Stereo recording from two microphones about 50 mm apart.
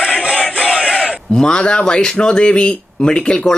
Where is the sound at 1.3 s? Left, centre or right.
Centre.